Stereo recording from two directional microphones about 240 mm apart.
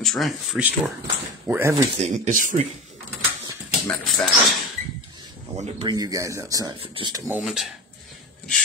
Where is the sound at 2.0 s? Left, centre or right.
Right.